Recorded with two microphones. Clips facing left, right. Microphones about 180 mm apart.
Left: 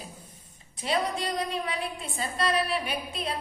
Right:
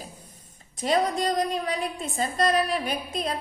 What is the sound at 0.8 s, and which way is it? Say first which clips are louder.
A woman's voice: right 5 dB; 45° right (ahead or behind).